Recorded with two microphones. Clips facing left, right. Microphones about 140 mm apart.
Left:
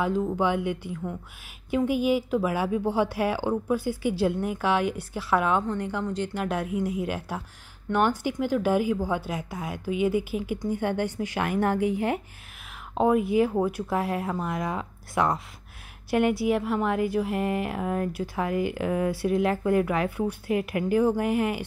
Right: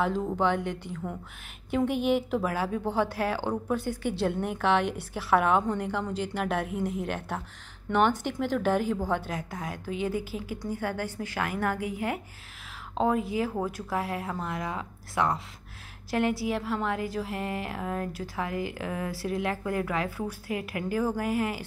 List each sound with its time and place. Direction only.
0.0 s a woman's voice: centre (ahead or behind); by 12.2 s 25° left (ahead or behind)
12.9 s a woman's voice: 15° left (ahead or behind)